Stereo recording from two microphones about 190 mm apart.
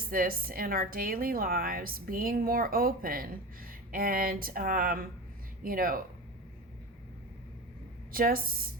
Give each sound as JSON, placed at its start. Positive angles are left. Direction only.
{"t": 0.1, "sound": "a woman's voice", "side_deg": -50}
{"t": 8.1, "sound": "a woman's voice", "side_deg": -50}